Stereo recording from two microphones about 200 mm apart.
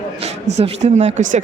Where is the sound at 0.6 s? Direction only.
35° right (ahead or behind).